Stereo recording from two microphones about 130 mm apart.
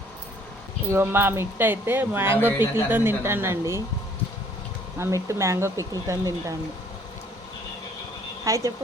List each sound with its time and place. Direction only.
0.9 s speech: 15° right (ahead or behind)
4.9 s speech: 20° right (ahead or behind)
8.4 s speech: 25° right (ahead or behind)